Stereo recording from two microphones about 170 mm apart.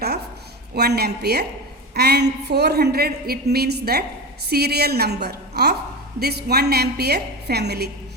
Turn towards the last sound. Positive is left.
turn(degrees=-75)  # may be behind; listen again after turning